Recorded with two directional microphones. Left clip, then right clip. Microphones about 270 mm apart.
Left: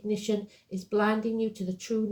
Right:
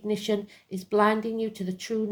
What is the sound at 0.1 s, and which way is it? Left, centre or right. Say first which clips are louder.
Speech: right 2 dB; right.